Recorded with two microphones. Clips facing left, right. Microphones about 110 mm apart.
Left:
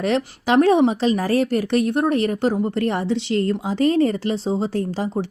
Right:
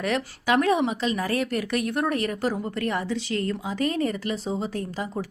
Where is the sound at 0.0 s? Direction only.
25° left (ahead or behind).